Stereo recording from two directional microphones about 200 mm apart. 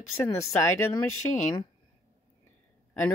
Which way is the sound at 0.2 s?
15° left (ahead or behind).